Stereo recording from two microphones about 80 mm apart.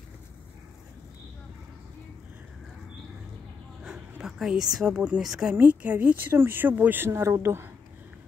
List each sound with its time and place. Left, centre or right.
3.8 s a sound: centre
4.7 s speech: centre
5.5 s speech: centre
7.1 s speech: right